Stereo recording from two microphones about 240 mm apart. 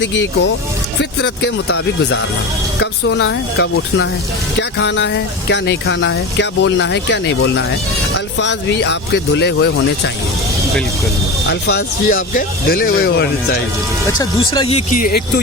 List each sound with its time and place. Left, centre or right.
0.0 s speech: left
11.4 s speech: left
14.1 s speech: centre; by 15.2 s left